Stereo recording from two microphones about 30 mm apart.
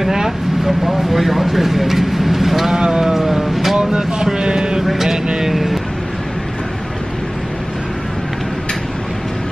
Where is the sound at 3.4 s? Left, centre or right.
Centre.